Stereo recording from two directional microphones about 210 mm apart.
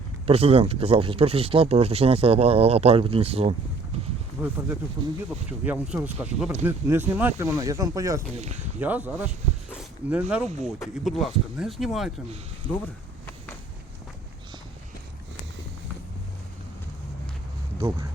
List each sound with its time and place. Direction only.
0.3 s speech: 30° right (ahead or behind)
4.4 s speech: 5° right (ahead or behind)
5.6 s speech: 5° right (ahead or behind)